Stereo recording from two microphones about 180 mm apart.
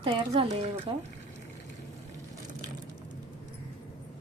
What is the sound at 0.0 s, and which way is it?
Speech, 30° right (ahead or behind).